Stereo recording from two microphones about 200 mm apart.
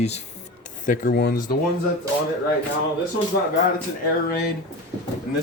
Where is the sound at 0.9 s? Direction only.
50° left (ahead or behind).